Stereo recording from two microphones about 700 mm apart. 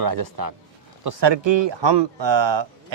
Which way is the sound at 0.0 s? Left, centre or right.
Right.